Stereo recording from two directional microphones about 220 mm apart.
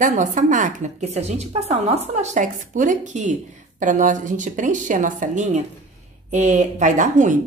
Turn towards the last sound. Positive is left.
turn(degrees=-35)  # may be behind; listen again after turning